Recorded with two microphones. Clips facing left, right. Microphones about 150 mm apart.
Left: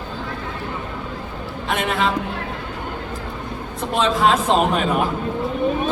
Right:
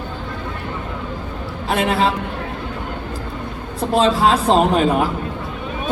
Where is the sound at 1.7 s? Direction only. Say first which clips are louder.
Right 3 dB; 35° right (ahead or behind).